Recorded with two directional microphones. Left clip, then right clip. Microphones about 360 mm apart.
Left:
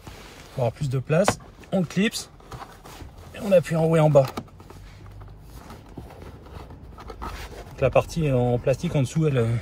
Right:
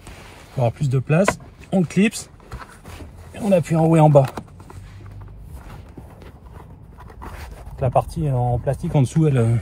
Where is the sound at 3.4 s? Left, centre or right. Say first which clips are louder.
Right 1 dB; right.